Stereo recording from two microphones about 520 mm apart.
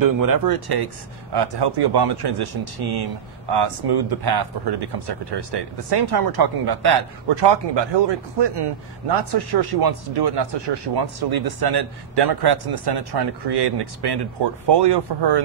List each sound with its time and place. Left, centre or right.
0.0 s speech: right